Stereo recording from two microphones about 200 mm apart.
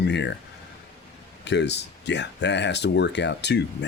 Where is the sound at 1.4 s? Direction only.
60° left (ahead or behind).